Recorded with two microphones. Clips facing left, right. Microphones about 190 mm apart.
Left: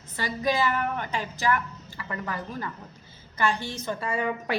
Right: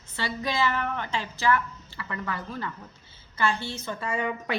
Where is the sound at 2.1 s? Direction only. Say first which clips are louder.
Left 1 dB; 35° left (ahead or behind).